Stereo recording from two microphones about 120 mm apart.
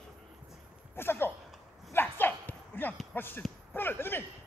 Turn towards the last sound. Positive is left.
turn(degrees=15)  # may be behind; listen again after turning